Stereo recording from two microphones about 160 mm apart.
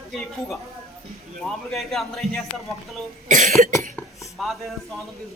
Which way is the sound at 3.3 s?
50° right (ahead or behind).